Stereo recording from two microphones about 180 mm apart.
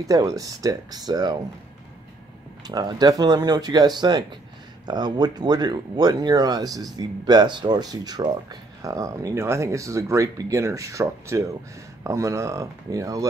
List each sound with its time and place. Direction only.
0.0 s speech: 20° right (ahead or behind)
2.6 s speech: 20° right (ahead or behind)